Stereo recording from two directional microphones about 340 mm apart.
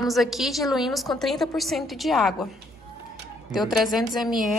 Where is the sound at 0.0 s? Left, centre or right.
Centre.